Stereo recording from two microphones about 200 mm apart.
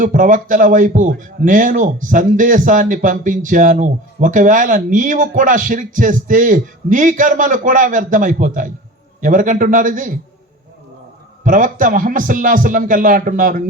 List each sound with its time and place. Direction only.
0.0 s a man's voice: 40° right (ahead or behind)
11.4 s a man's voice: 40° right (ahead or behind)